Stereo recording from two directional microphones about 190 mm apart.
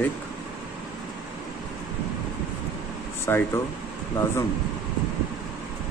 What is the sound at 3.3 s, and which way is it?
Speech, 15° left (ahead or behind).